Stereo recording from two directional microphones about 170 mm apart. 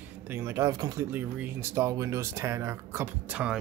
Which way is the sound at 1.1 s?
10° right (ahead or behind).